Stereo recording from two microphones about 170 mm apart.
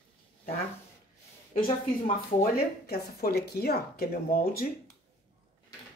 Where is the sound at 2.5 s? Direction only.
65° left (ahead or behind).